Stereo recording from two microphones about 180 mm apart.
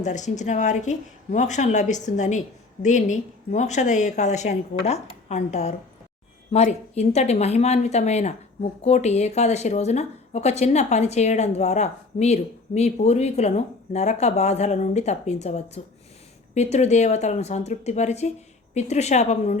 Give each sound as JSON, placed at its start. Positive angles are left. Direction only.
{"t": 0.0, "sound": "speech", "side_deg": 40}